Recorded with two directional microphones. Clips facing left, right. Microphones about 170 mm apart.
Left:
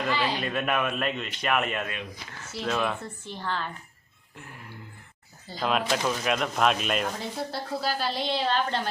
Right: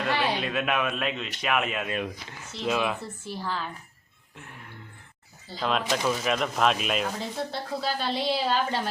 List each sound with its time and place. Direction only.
0.1 s a man's voice: 60° right (ahead or behind)
0.3 s speech: centre (ahead or behind)
5.5 s speech: 5° left (ahead or behind)